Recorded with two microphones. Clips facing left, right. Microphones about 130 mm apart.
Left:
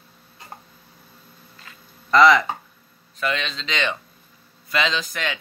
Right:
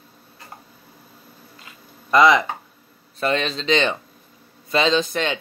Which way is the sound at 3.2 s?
35° right (ahead or behind).